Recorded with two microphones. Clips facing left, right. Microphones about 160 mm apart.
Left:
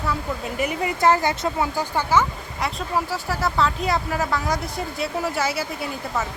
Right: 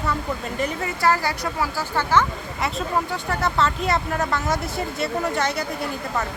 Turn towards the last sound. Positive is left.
turn(degrees=5)  # may be behind; listen again after turning